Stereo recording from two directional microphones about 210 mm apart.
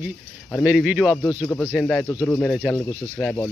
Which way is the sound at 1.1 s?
15° left (ahead or behind).